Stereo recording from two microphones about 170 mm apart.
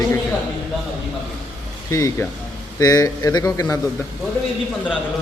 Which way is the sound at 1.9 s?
15° left (ahead or behind).